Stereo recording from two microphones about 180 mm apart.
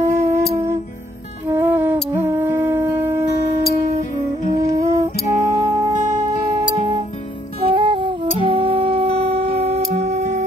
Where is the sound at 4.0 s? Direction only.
50° left (ahead or behind).